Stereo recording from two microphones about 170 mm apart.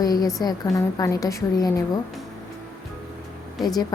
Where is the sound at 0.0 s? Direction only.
20° left (ahead or behind).